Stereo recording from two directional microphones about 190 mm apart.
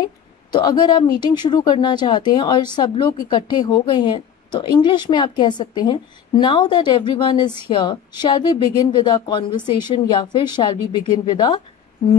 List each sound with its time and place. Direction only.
0.0 s speech: 20° left (ahead or behind)